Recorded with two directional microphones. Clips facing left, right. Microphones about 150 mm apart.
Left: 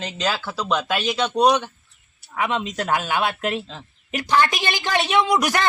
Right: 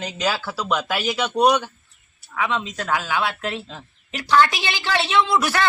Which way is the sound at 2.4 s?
20° left (ahead or behind).